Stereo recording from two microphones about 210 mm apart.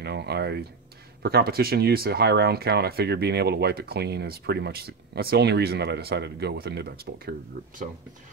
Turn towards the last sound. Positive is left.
turn(degrees=-45)  # may be behind; listen again after turning